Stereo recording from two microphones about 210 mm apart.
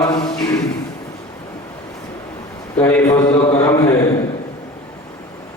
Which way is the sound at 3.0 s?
20° left (ahead or behind).